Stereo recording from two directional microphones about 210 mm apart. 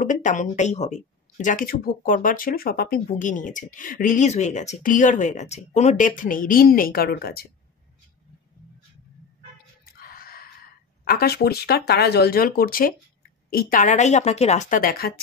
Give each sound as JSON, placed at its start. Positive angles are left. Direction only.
{"t": 0.0, "sound": "speech", "side_deg": 35}
{"t": 9.9, "sound": "gasp", "side_deg": 45}
{"t": 11.1, "sound": "speech", "side_deg": 45}